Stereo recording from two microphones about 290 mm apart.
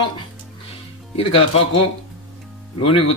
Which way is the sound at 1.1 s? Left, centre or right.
Centre.